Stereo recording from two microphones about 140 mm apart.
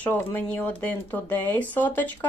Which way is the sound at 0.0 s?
10° left (ahead or behind).